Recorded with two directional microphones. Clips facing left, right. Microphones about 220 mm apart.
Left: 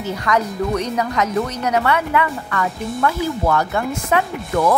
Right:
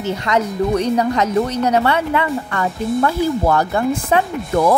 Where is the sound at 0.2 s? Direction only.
30° right (ahead or behind).